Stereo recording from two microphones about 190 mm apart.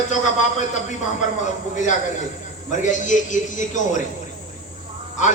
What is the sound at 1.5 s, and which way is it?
A man's voice, 40° left (ahead or behind).